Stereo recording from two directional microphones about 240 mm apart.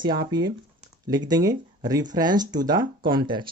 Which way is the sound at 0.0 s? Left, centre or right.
Centre.